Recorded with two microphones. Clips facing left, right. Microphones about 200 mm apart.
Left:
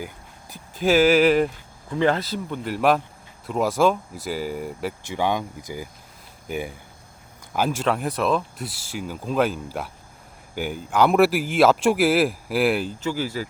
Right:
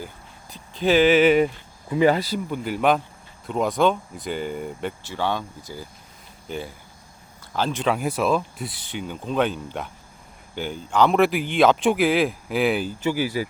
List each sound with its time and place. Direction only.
0.5 s speech: 5° left (ahead or behind)
5.0 s speech: 15° left (ahead or behind)
7.9 s speech: centre (ahead or behind)
13.1 s speech: 15° right (ahead or behind)